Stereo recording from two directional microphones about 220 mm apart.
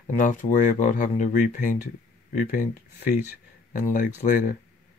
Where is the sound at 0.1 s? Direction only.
35° left (ahead or behind).